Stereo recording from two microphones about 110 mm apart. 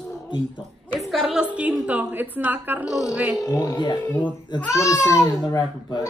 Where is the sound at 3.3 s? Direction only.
30° left (ahead or behind).